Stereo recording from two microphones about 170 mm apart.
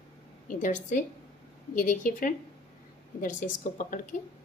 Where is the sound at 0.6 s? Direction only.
50° left (ahead or behind).